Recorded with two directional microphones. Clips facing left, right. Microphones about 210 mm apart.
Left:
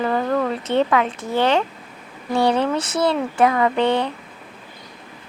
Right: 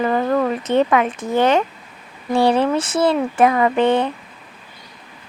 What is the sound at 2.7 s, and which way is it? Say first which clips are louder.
Speech: right 3 dB; 50° right (ahead or behind).